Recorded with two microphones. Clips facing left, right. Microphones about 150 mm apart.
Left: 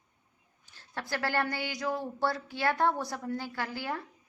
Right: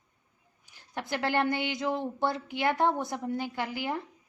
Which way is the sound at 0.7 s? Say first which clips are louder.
Right 2 dB; 15° right (ahead or behind).